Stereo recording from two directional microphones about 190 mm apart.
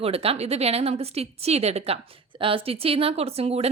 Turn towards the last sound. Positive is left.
turn(degrees=-30)  # may be behind; listen again after turning